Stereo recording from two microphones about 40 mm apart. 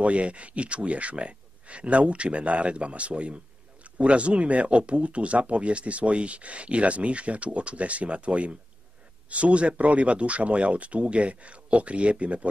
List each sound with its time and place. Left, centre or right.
0.0 s speech: right